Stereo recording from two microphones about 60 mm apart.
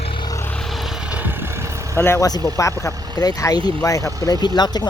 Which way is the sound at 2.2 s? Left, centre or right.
Left.